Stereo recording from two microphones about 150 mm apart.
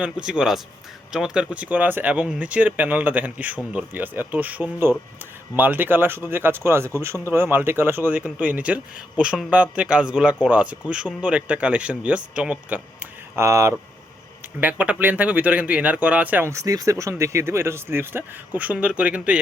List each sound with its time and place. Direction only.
0.0 s speech: 5° right (ahead or behind)